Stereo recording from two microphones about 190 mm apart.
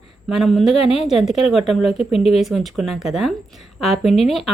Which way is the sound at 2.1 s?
30° left (ahead or behind).